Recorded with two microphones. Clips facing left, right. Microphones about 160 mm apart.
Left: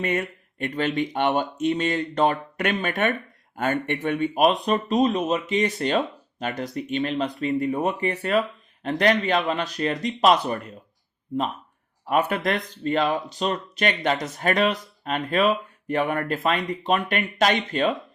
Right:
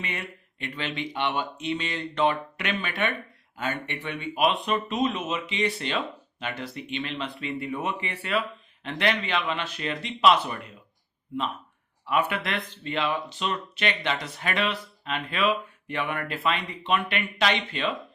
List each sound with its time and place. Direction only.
0.0 s speech: 45° left (ahead or behind)
12.0 s speech: 40° left (ahead or behind)